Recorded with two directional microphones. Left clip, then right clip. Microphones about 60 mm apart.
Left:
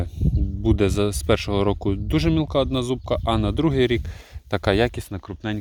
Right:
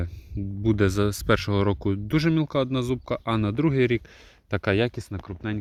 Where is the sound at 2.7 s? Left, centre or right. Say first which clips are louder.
Left 4 dB; left.